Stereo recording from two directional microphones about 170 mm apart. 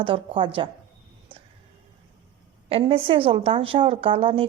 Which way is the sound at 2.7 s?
30° right (ahead or behind).